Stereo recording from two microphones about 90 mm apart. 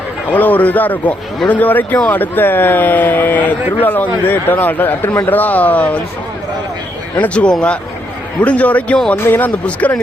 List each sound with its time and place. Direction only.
0.3 s speech: 20° left (ahead or behind)
7.2 s speech: 10° left (ahead or behind)